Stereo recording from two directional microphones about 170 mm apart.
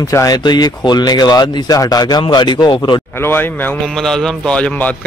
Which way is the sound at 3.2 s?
10° left (ahead or behind).